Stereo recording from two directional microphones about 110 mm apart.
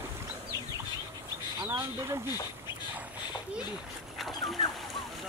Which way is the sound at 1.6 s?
20° right (ahead or behind).